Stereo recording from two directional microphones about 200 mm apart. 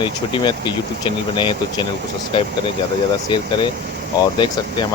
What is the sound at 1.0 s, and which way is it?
Speech, 25° left (ahead or behind).